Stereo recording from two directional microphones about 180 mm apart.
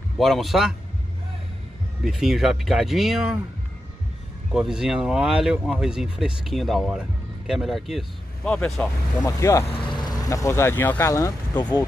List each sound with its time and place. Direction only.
0.2 s speech: centre (ahead or behind)
2.0 s speech: centre (ahead or behind)
4.5 s speech: 5° right (ahead or behind)
9.2 s speech: 15° left (ahead or behind)
9.7 s speech: 25° left (ahead or behind)